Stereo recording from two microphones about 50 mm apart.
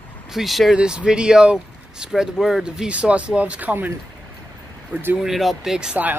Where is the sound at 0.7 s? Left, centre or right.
Centre.